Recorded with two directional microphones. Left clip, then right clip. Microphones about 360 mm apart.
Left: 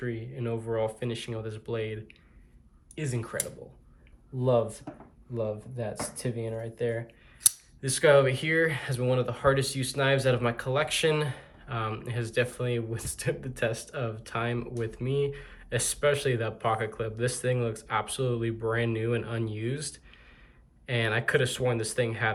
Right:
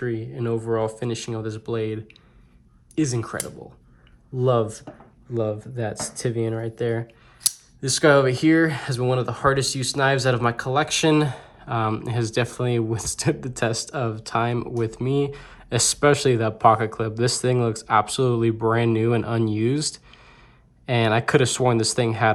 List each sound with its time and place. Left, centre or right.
0.0 s speech: centre
4.4 s speech: centre